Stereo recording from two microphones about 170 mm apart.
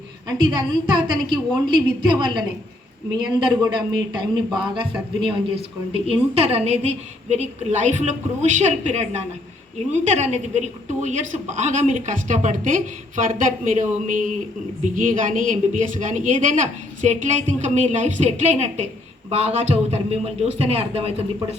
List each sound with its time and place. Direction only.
0.3 s a man's voice: 25° right (ahead or behind)